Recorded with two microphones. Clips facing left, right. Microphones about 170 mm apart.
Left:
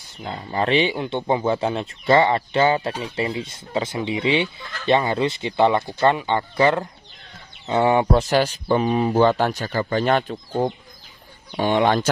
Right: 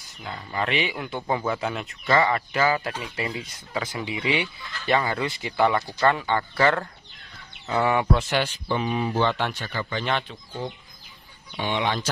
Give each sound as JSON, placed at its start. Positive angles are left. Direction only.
{"t": 0.0, "sound": "speech", "side_deg": 30}